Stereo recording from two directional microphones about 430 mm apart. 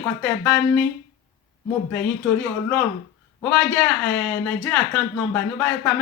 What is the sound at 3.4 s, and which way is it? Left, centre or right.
Speech, centre.